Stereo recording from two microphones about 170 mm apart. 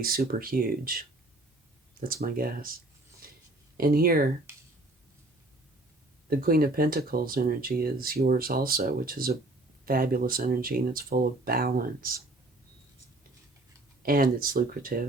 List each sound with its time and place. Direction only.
0.0 s speech: 60° right (ahead or behind)
3.2 s a sound: 55° right (ahead or behind)
3.8 s speech: 60° right (ahead or behind)
6.3 s speech: 60° right (ahead or behind)
14.0 s speech: 55° right (ahead or behind)